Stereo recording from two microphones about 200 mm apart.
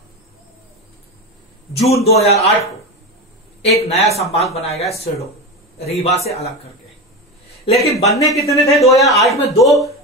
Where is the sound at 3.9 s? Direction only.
30° left (ahead or behind).